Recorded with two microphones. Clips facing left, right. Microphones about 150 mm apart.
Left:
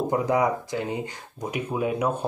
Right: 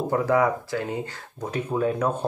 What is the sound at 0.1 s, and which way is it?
Speech, 15° left (ahead or behind).